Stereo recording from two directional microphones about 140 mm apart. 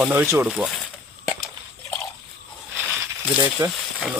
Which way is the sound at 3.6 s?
25° right (ahead or behind).